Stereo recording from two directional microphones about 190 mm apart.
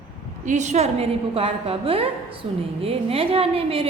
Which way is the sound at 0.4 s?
40° right (ahead or behind).